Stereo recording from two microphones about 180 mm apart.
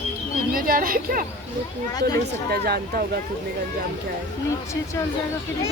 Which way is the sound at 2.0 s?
20° left (ahead or behind).